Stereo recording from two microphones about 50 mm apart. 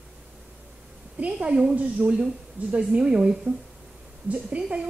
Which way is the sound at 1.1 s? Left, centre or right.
Right.